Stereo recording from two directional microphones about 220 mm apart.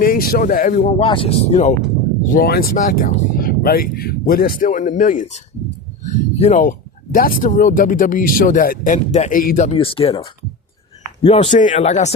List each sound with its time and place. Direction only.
0.0 s speech: 40° left (ahead or behind)
2.3 s speech: 45° left (ahead or behind)